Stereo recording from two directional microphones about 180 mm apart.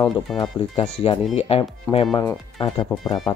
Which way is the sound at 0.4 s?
35° left (ahead or behind).